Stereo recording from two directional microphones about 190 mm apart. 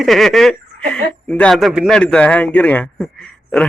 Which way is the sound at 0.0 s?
Centre (ahead or behind).